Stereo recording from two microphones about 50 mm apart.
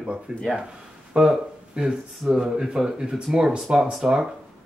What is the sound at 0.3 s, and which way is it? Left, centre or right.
Speech, centre.